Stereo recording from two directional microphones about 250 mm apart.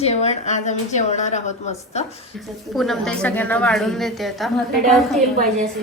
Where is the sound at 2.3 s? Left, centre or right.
Centre.